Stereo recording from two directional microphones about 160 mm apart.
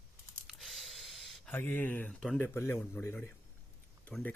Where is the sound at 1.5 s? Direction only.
10° left (ahead or behind).